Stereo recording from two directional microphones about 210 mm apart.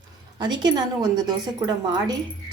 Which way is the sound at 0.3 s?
20° right (ahead or behind).